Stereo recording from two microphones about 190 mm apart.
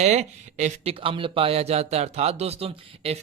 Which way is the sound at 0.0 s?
40° right (ahead or behind).